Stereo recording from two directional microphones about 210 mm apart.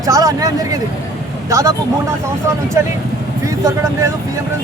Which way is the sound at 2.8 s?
15° right (ahead or behind).